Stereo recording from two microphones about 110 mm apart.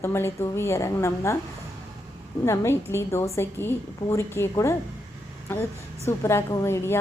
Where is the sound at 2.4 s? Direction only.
25° left (ahead or behind).